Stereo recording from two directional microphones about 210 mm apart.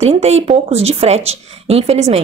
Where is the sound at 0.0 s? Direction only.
30° right (ahead or behind).